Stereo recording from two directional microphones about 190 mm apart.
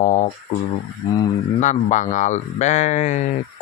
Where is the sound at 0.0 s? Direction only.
40° left (ahead or behind).